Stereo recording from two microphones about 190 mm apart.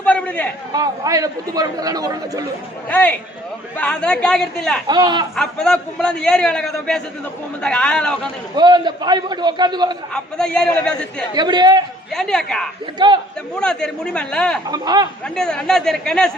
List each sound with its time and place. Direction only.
0.0 s a sound: 5° left (ahead or behind)
0.7 s a man's voice: 20° right (ahead or behind)
2.9 s a man's voice: 5° left (ahead or behind)
4.9 s a man's voice: 20° right (ahead or behind)
5.4 s a man's voice: 5° left (ahead or behind)
8.5 s a man's voice: 25° right (ahead or behind)
10.1 s a man's voice: 5° left (ahead or behind)
11.3 s a man's voice: 20° right (ahead or behind)
12.1 s a man's voice: 5° left (ahead or behind)
13.0 s a man's voice: 25° right (ahead or behind)
13.6 s a man's voice: 5° left (ahead or behind)
14.7 s a man's voice: 20° right (ahead or behind)
15.4 s a man's voice: 5° left (ahead or behind)